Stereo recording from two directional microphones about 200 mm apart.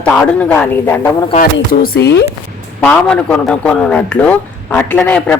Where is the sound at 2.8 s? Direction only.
5° left (ahead or behind).